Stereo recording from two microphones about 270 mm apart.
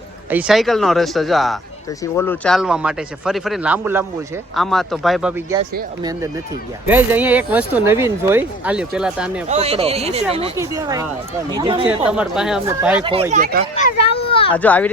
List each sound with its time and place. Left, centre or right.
0.3 s speech: centre
5.5 s speech: centre
6.8 s speech: centre
9.5 s speech: right
10.6 s speech: centre
12.1 s speech: centre
13.3 s speech: right
13.7 s a child's voice: left
14.5 s speech: centre